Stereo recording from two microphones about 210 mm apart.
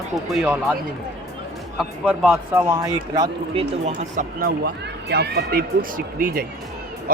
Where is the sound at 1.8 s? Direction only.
5° right (ahead or behind).